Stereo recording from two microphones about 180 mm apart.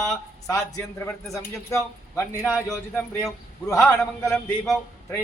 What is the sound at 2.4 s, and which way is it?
Speech, centre (ahead or behind).